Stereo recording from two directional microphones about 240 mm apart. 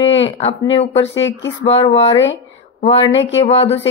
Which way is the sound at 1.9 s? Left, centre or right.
Left.